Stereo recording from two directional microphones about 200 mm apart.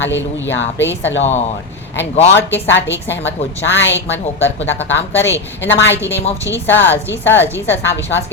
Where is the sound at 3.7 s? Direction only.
65° left (ahead or behind).